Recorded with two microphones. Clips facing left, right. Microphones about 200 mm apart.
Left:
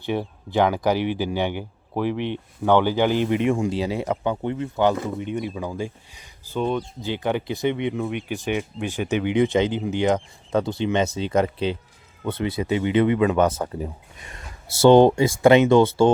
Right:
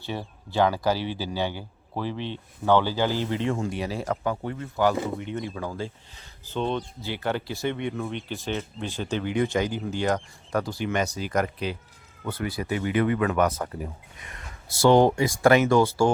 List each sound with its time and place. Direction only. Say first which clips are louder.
0.0 s speech: left 7 dB; 15° left (ahead or behind)